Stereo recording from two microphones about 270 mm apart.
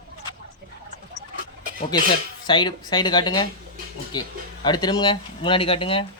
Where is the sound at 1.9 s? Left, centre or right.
Centre.